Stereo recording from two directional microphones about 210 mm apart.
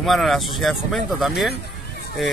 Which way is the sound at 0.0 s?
Centre (ahead or behind).